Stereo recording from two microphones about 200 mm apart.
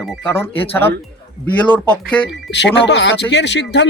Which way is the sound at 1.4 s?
5° left (ahead or behind).